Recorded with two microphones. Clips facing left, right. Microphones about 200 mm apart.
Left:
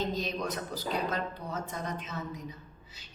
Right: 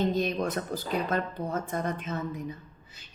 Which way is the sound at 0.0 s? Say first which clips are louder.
Right 6 dB; 55° right (ahead or behind).